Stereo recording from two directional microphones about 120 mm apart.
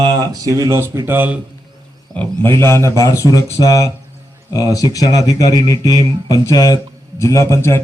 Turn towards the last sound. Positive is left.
turn(degrees=20)  # may be behind; listen again after turning